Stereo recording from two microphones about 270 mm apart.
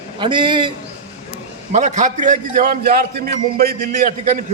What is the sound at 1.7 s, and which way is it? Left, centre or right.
A man's voice, right.